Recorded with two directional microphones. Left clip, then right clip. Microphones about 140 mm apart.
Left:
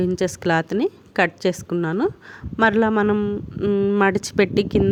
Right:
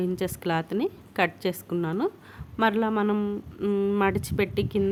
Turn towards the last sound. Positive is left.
turn(degrees=50)  # may be behind; listen again after turning